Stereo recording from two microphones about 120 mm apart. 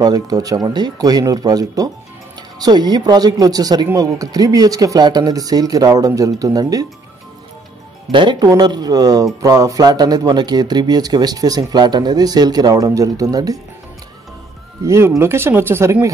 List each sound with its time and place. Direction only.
0.0 s speech: 30° right (ahead or behind)
8.1 s speech: 40° right (ahead or behind)
14.9 s speech: 20° right (ahead or behind)